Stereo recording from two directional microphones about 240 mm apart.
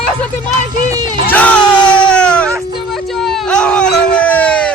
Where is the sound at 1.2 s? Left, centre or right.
Centre.